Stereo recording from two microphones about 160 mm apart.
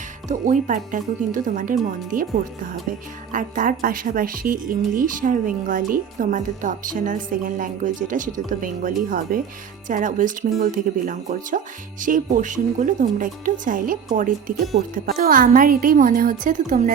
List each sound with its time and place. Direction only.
0.3 s speech: 55° right (ahead or behind)
3.3 s speech: 55° right (ahead or behind)